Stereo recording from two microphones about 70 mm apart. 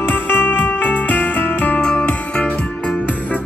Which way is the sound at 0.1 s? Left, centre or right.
Left.